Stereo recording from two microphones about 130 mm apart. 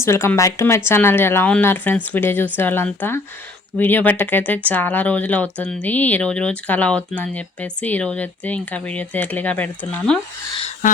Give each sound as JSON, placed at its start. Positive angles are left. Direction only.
{"t": 0.0, "sound": "speech", "side_deg": 20}